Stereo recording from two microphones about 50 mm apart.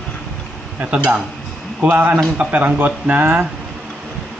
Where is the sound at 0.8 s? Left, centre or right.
Right.